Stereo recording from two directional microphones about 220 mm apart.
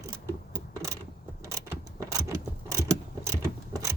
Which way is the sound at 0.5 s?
15° right (ahead or behind).